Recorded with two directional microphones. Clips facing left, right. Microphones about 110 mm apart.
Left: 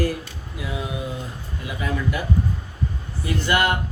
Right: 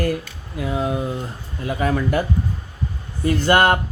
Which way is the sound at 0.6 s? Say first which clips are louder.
Right 7 dB; 45° right (ahead or behind).